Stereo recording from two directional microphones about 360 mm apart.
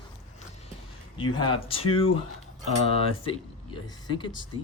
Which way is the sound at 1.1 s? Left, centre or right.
Centre.